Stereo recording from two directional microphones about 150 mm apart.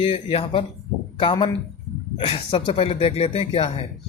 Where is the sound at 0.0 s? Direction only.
35° left (ahead or behind).